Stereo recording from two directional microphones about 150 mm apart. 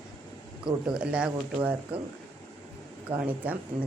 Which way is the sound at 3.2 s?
10° right (ahead or behind).